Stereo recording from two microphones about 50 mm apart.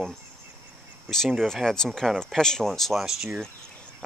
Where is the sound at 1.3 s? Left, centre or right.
Centre.